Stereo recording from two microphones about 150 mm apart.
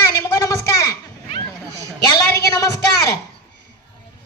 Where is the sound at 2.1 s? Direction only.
25° left (ahead or behind).